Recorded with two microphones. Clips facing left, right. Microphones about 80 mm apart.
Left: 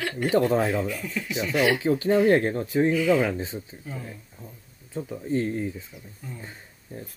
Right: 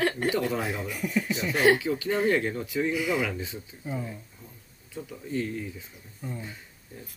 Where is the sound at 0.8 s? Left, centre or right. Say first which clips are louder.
Left 1 dB; centre.